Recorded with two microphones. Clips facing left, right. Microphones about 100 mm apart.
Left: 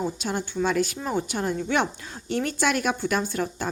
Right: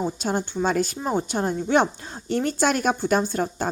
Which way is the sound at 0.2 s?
35° right (ahead or behind).